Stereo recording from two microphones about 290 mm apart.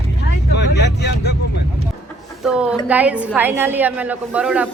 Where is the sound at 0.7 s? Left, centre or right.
Left.